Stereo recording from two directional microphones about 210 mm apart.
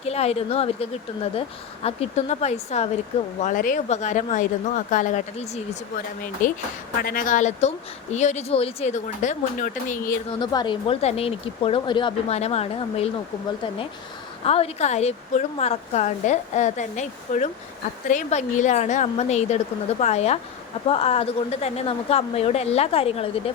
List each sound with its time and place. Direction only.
0.0 s a woman's voice: 30° left (ahead or behind)
10.4 s speech: 20° left (ahead or behind)
14.4 s a woman's voice: 30° left (ahead or behind)